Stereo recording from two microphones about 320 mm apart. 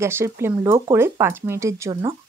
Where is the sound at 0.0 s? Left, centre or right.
Centre.